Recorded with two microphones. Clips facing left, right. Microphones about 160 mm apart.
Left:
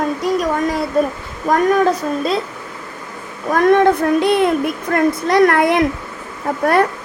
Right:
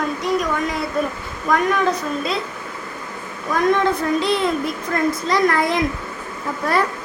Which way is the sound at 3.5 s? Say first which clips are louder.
Left 6 dB; 55° left (ahead or behind).